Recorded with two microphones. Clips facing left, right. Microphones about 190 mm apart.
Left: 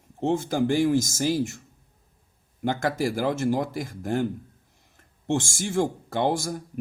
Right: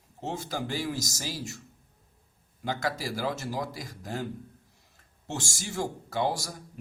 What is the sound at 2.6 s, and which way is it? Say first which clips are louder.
A man's voice: left 6 dB; 50° left (ahead or behind).